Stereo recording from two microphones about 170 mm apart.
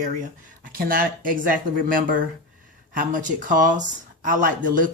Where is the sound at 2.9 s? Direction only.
50° right (ahead or behind).